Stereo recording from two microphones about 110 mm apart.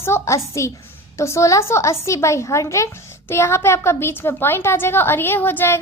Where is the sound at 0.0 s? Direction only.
25° left (ahead or behind).